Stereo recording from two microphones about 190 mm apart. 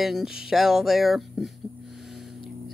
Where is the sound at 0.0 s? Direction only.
Centre (ahead or behind).